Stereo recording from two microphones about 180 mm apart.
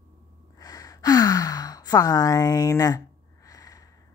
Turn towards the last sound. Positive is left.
turn(degrees=20)  # may be behind; listen again after turning